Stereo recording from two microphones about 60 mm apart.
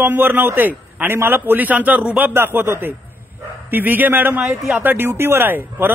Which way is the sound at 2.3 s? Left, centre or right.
Right.